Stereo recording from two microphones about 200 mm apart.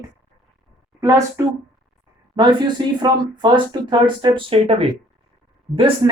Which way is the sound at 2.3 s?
20° right (ahead or behind).